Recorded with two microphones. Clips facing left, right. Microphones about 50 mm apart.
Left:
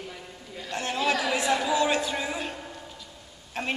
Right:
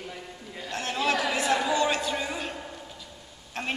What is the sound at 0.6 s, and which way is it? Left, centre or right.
Chatter, centre.